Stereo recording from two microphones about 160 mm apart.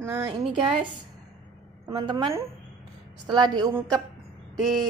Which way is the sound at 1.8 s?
25° right (ahead or behind).